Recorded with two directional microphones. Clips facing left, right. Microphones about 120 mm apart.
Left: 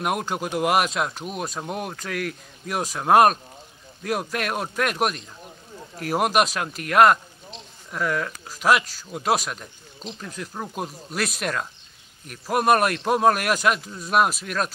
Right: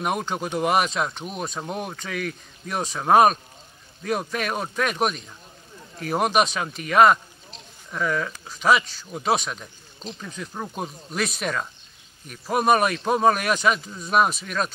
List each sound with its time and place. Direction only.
0.0 s speech: 5° left (ahead or behind)